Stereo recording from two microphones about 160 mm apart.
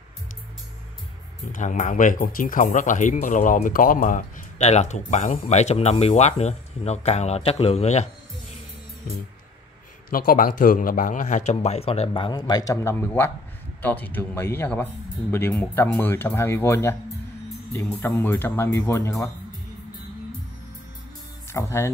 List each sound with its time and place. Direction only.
1.5 s speech: 50° left (ahead or behind)
10.0 s speech: 65° left (ahead or behind); by 16.9 s 15° left (ahead or behind)
18.0 s speech: 15° left (ahead or behind)
21.5 s speech: 15° left (ahead or behind)